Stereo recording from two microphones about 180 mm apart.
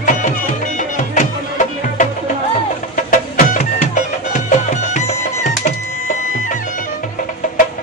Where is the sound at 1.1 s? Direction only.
45° left (ahead or behind).